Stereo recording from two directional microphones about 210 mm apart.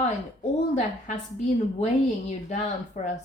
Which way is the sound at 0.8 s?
35° left (ahead or behind).